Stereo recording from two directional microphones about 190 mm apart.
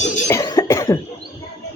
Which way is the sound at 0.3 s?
15° left (ahead or behind).